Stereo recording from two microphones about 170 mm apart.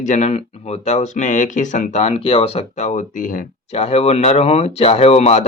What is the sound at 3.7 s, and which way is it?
Speech, 35° left (ahead or behind).